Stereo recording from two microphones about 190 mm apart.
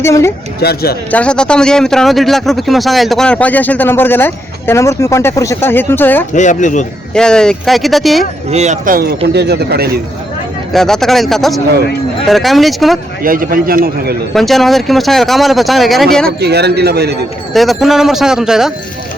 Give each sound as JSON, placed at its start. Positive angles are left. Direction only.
{"t": 0.0, "sound": "speech", "side_deg": 15}
{"t": 0.6, "sound": "speech", "side_deg": 55}
{"t": 1.1, "sound": "speech", "side_deg": 5}
{"t": 6.3, "sound": "speech", "side_deg": 40}
{"t": 7.1, "sound": "speech", "side_deg": 5}
{"t": 8.4, "sound": "speech", "side_deg": -35}
{"t": 10.7, "sound": "speech", "side_deg": 0}
{"t": 13.2, "sound": "a man's voice", "side_deg": -50}
{"t": 14.3, "sound": "speech", "side_deg": 0}
{"t": 16.4, "sound": "speech", "side_deg": -60}
{"t": 17.5, "sound": "speech", "side_deg": 0}